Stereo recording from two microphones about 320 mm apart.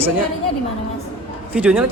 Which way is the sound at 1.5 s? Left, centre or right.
Centre.